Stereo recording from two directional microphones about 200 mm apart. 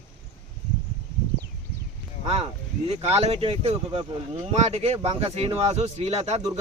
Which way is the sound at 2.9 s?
30° right (ahead or behind).